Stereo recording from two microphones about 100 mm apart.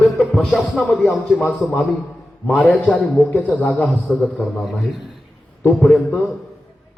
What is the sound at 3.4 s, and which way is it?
A man's voice, centre (ahead or behind).